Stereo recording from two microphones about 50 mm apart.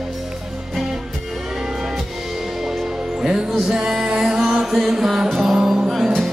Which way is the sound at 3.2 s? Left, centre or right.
Centre.